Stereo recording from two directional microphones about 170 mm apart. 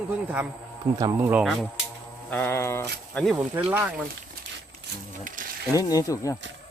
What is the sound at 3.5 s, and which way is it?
Speech, 10° right (ahead or behind).